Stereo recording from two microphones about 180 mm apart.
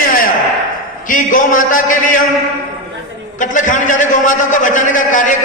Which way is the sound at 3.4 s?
45° left (ahead or behind).